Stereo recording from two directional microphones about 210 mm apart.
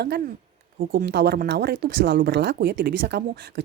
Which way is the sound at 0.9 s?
50° right (ahead or behind).